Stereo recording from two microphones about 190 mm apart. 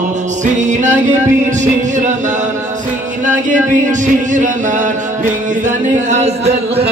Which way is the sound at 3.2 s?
40° right (ahead or behind).